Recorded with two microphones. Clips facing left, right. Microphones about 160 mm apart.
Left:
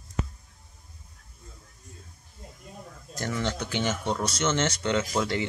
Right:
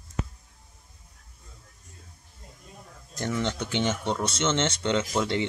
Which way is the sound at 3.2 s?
20° right (ahead or behind).